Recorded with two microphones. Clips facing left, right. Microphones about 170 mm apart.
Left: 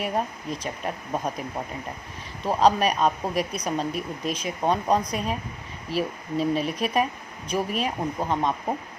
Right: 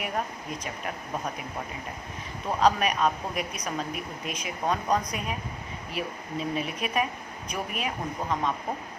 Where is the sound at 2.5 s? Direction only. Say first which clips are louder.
Left 3 dB; 30° left (ahead or behind).